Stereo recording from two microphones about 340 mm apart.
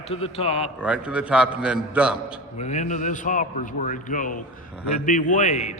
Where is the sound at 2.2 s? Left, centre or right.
Centre.